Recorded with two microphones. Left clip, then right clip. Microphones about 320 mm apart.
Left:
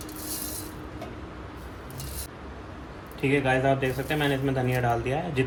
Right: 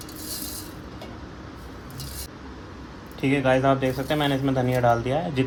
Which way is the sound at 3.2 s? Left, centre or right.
Centre.